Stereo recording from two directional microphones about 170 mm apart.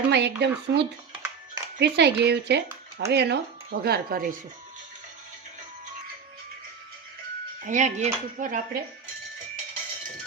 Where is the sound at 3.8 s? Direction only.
65° right (ahead or behind).